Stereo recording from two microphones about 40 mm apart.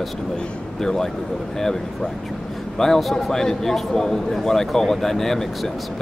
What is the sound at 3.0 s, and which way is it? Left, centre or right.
Speech, centre.